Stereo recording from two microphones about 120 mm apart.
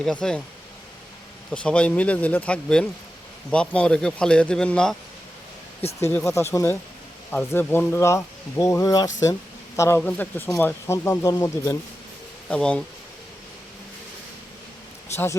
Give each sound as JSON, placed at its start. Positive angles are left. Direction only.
{"t": 0.0, "sound": "speech", "side_deg": 5}
{"t": 1.5, "sound": "speech", "side_deg": 10}
{"t": 6.1, "sound": "speech", "side_deg": 25}
{"t": 7.3, "sound": "speech", "side_deg": 15}
{"t": 10.0, "sound": "speech", "side_deg": 15}
{"t": 12.5, "sound": "speech", "side_deg": 10}
{"t": 15.1, "sound": "speech", "side_deg": 20}